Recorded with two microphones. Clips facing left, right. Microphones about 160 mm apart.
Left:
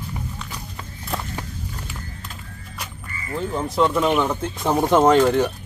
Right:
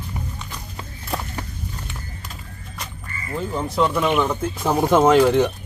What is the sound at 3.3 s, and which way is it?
Speech, 5° right (ahead or behind).